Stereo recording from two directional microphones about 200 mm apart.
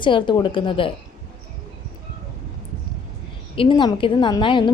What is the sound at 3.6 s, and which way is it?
Speech, 25° left (ahead or behind).